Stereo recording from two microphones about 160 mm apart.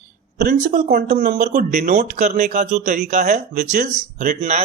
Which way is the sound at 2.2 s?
50° right (ahead or behind).